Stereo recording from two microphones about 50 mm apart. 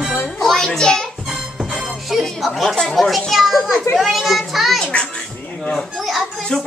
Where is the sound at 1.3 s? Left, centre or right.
Centre.